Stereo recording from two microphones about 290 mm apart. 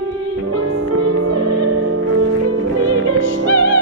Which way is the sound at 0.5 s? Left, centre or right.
Right.